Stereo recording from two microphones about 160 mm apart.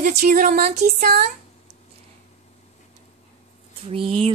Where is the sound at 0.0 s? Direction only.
55° right (ahead or behind).